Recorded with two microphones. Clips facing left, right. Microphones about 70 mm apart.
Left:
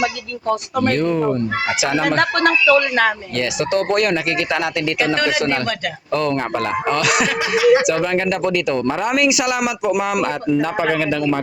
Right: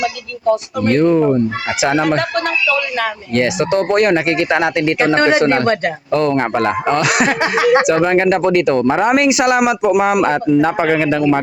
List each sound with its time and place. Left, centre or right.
0.9 s speech: right
2.0 s speech: left
3.3 s speech: right
6.9 s speech: right
7.9 s speech: right
10.2 s speech: right